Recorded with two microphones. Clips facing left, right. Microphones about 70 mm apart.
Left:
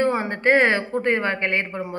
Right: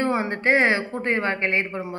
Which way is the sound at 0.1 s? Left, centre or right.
Left.